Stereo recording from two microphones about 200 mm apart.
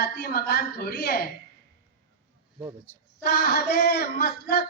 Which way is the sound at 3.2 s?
50° left (ahead or behind).